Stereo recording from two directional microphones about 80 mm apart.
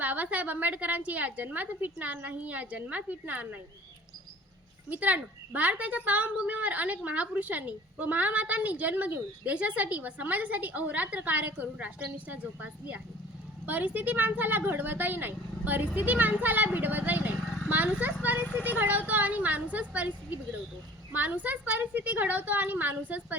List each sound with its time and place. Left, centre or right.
0.0 s a woman's voice: centre
4.9 s a woman's voice: centre